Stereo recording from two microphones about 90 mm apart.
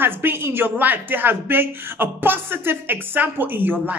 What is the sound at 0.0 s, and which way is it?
A woman's voice, 25° right (ahead or behind).